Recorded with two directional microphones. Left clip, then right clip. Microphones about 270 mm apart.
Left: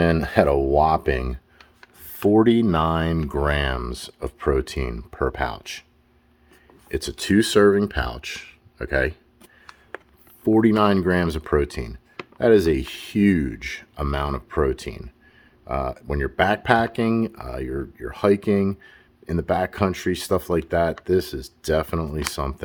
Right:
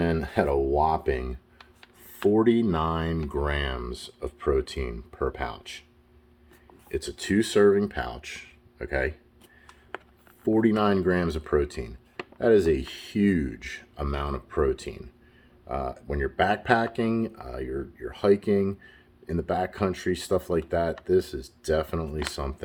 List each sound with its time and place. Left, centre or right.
0.0 s speech: left
6.8 s speech: left
10.4 s speech: left